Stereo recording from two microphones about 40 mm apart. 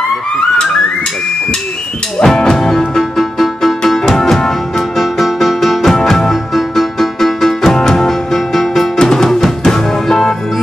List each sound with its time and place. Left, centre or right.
0.4 s music: centre
2.2 s music: centre